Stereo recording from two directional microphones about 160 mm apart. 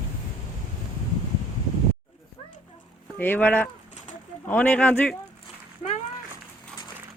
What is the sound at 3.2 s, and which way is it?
Speech, 10° left (ahead or behind).